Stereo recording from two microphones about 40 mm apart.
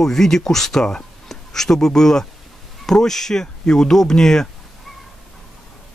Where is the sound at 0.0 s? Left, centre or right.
Centre.